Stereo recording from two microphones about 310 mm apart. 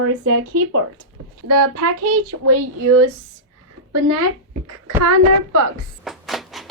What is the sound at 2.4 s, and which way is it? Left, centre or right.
Speech, right.